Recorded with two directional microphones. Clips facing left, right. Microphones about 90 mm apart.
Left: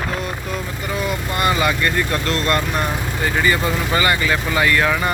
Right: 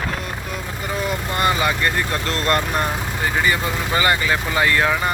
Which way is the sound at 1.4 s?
25° right (ahead or behind).